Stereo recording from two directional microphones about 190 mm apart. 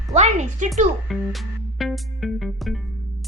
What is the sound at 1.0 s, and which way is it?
Music, centre (ahead or behind).